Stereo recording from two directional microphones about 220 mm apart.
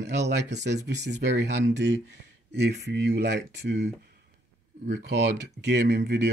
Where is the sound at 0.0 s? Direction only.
50° right (ahead or behind).